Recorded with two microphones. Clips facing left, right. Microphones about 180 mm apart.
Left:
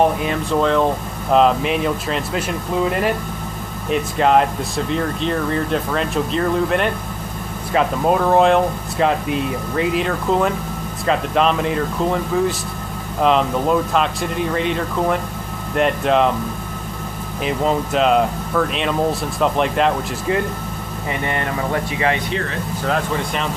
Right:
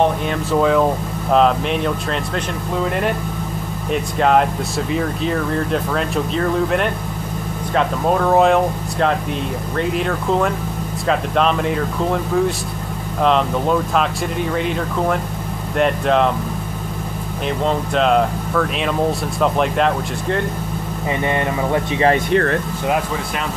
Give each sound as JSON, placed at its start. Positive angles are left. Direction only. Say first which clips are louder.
{"t": 0.0, "sound": "speech", "louder": "even", "side_deg": 0}
{"t": 3.9, "sound": "speech", "louder": "even", "side_deg": 0}
{"t": 17.5, "sound": "speech", "louder": "left 1 dB", "side_deg": 5}
{"t": 21.2, "sound": "speech", "louder": "right 4 dB", "side_deg": -20}
{"t": 21.9, "sound": "speech", "louder": "right 6 dB", "side_deg": -35}
{"t": 22.3, "sound": "speech", "louder": "right 8 dB", "side_deg": -55}
{"t": 22.8, "sound": "speech", "louder": "even", "side_deg": -10}